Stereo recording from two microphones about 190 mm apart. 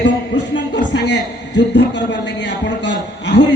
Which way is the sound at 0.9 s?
65° left (ahead or behind).